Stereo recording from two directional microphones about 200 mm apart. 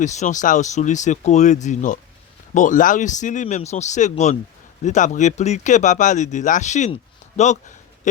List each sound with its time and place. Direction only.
0.0 s speech: 35° left (ahead or behind)